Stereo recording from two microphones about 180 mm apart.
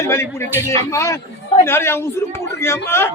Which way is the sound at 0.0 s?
15° left (ahead or behind).